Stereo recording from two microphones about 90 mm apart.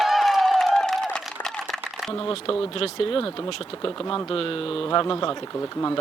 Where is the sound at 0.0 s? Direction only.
Centre (ahead or behind).